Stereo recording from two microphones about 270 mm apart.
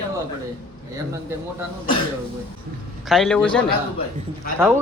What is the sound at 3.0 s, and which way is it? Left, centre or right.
Speech, centre.